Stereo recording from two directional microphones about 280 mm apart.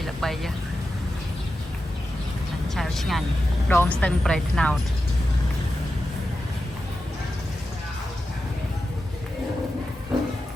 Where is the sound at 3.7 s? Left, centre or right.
Centre.